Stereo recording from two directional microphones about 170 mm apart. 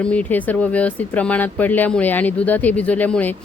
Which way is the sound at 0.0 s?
5° left (ahead or behind).